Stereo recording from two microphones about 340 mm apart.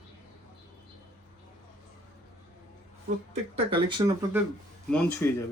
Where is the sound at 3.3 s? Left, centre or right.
Centre.